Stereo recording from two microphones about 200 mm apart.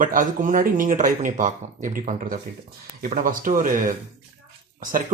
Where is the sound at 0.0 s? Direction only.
40° right (ahead or behind).